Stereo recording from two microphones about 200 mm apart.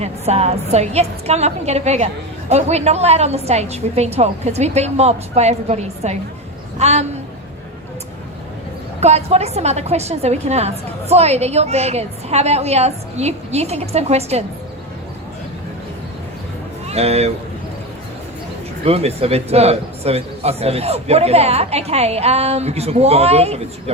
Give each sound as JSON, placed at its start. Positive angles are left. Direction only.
{"t": 0.0, "sound": "a woman's voice", "side_deg": -30}
{"t": 9.0, "sound": "speech", "side_deg": -35}
{"t": 16.9, "sound": "speech", "side_deg": -30}
{"t": 18.9, "sound": "speech", "side_deg": -30}